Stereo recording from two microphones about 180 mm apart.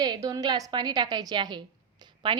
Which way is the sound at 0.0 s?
20° right (ahead or behind).